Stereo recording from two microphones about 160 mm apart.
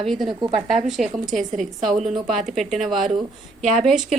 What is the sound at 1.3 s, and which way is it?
Speech, 50° right (ahead or behind).